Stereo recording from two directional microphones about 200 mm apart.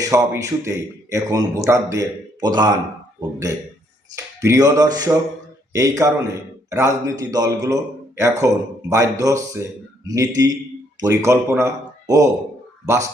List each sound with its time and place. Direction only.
0.0 s a man's voice: 15° right (ahead or behind)
4.1 s a man's voice: 15° right (ahead or behind)